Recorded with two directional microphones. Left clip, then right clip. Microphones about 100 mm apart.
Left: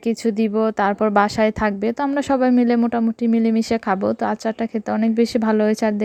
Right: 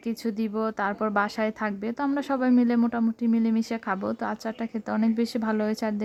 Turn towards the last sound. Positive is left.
turn(degrees=40)  # may be behind; listen again after turning